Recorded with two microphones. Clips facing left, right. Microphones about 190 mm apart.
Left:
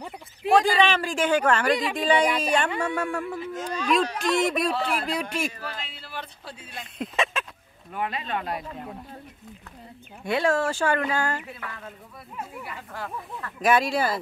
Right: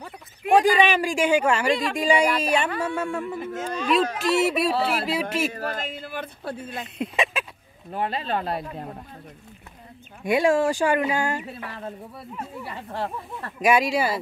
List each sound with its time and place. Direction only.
0.6 s speech: 15° right (ahead or behind)
4.7 s speech: 35° right (ahead or behind)
5.0 s speech: 5° right (ahead or behind)
5.5 s speech: 45° right (ahead or behind)
7.0 s speech: 10° right (ahead or behind)
7.9 s speech: 30° right (ahead or behind)
10.2 s speech: 15° right (ahead or behind)
11.4 s speech: 30° right (ahead or behind)
13.6 s speech: 10° right (ahead or behind)